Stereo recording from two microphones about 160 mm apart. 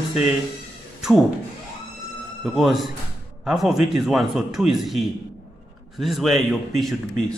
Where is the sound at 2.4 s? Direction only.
Centre (ahead or behind).